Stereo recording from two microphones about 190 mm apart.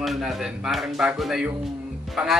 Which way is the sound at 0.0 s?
Centre (ahead or behind).